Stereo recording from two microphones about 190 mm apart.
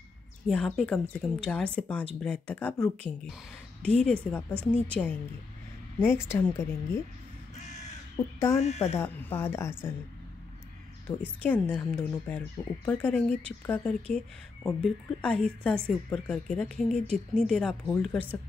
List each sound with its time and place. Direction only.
0.5 s a woman's voice: 5° left (ahead or behind)
7.5 s crow: 40° left (ahead or behind)
8.2 s speech: 15° left (ahead or behind)
8.5 s speech: 35° left (ahead or behind)
8.9 s speech: 10° left (ahead or behind)
11.4 s a woman's voice: 10° left (ahead or behind)